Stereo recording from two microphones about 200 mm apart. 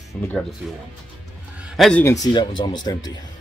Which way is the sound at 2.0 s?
15° left (ahead or behind).